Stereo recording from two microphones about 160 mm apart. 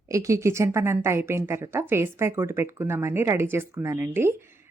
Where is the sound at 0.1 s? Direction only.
20° right (ahead or behind).